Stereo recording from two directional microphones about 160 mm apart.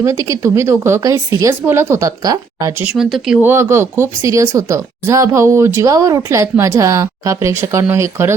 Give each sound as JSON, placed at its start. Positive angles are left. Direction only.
{"t": 0.0, "sound": "speech", "side_deg": -20}
{"t": 3.5, "sound": "speech", "side_deg": -15}